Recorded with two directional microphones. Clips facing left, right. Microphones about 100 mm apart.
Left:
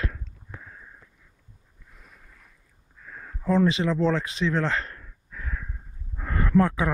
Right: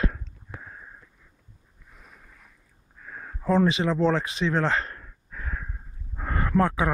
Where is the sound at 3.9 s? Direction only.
25° right (ahead or behind).